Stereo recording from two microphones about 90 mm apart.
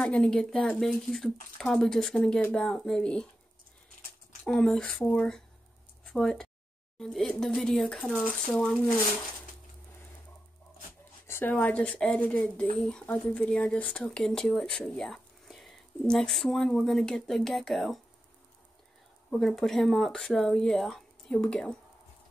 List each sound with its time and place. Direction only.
0.0 s speech: 10° left (ahead or behind)
4.5 s speech: 5° left (ahead or behind)
11.2 s speech: 25° left (ahead or behind); by 18.0 s centre (ahead or behind)
19.3 s speech: 5° left (ahead or behind)